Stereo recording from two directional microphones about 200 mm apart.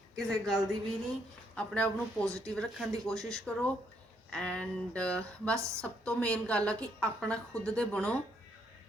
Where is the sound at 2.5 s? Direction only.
Centre (ahead or behind).